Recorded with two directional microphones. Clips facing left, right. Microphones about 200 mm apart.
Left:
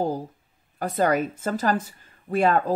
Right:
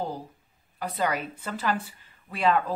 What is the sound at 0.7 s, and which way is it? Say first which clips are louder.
Speech: left 6 dB; 45° left (ahead or behind).